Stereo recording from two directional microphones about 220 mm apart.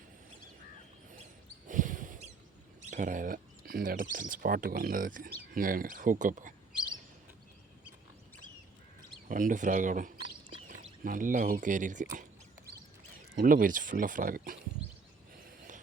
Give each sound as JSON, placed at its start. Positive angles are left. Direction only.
{"t": 1.6, "sound": "a sound", "side_deg": -35}
{"t": 2.9, "sound": "speech", "side_deg": -35}
{"t": 9.3, "sound": "speech", "side_deg": -35}
{"t": 13.3, "sound": "speech", "side_deg": -40}